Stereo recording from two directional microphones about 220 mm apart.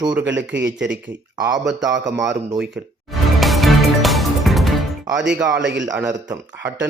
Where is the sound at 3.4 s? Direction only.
Centre (ahead or behind).